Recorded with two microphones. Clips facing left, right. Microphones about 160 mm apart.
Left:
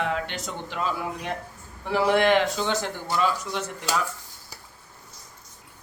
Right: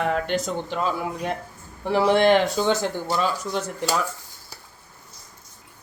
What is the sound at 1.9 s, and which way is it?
Speech, 35° right (ahead or behind).